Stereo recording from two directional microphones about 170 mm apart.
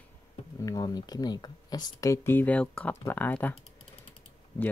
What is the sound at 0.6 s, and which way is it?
Speech, 20° left (ahead or behind).